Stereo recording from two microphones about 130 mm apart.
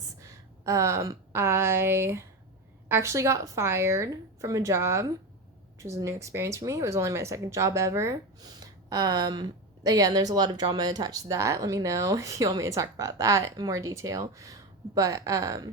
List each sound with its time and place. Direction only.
0.2 s speech: 25° right (ahead or behind)